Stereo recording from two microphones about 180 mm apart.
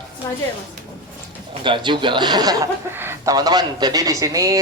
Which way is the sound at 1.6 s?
25° right (ahead or behind).